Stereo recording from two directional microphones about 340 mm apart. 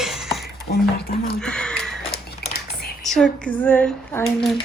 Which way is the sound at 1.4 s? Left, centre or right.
Centre.